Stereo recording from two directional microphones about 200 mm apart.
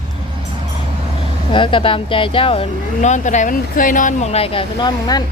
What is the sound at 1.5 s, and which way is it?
Speech, 25° left (ahead or behind).